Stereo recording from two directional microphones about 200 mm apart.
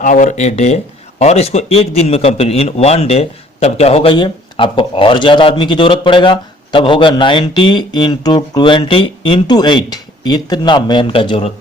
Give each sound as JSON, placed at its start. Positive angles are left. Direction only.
{"t": 0.0, "sound": "a man's voice", "side_deg": 40}